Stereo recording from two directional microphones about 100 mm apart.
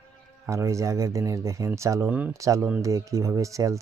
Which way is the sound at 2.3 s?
30° right (ahead or behind).